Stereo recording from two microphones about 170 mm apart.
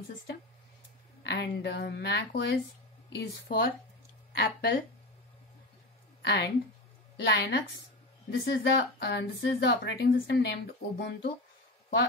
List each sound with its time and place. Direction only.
1.2 s a woman's voice: 85° left
3.1 s a woman's voice: 65° left (ahead or behind)
6.2 s a woman's voice: 90° left
7.2 s a woman's voice: 80° left